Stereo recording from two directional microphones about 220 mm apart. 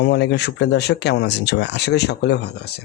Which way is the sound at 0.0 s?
50° left (ahead or behind).